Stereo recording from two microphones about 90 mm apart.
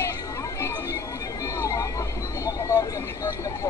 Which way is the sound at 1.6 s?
40° left (ahead or behind).